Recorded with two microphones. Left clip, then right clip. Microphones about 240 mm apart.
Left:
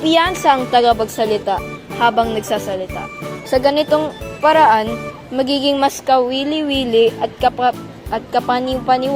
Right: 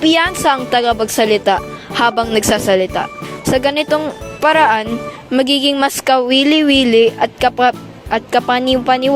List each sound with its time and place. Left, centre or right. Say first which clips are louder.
0.0 s speech: right 1 dB; right